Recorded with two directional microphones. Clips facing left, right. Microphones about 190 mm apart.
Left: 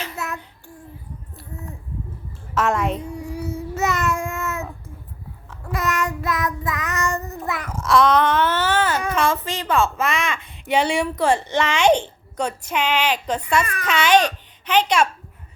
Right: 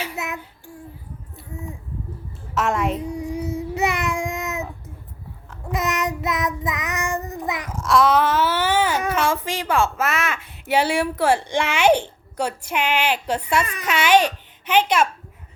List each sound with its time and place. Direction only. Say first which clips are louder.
0.0 s child singing: right 1 dB; 15° right (ahead or behind)
2.6 s a child's voice: left 1 dB; centre (ahead or behind)
3.1 s child singing: right 2 dB; 15° right (ahead or behind)
5.7 s child singing: even; 20° right (ahead or behind)
7.7 s a child's voice: left 1 dB; centre (ahead or behind)